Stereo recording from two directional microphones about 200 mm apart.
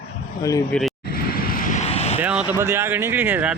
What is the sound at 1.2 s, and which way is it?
Vehicle, 50° left (ahead or behind).